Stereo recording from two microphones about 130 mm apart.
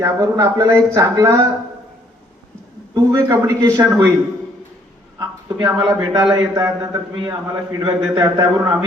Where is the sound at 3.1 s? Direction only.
25° right (ahead or behind).